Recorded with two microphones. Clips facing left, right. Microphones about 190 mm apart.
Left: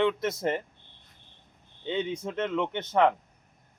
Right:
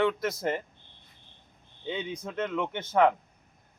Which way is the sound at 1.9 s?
25° left (ahead or behind).